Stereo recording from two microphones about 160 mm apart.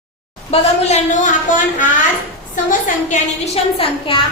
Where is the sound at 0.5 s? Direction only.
45° left (ahead or behind).